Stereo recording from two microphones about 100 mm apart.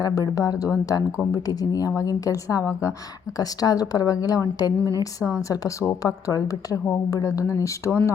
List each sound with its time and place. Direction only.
0.0 s a woman's voice: 35° left (ahead or behind)